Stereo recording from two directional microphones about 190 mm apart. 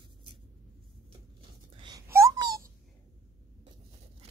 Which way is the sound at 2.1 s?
15° right (ahead or behind).